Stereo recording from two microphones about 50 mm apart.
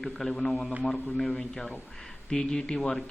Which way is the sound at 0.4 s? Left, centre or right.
Centre.